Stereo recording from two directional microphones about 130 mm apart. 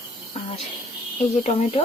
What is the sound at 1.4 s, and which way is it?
Speech, 55° left (ahead or behind).